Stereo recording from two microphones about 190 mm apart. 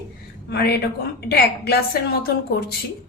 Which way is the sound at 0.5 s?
60° left (ahead or behind).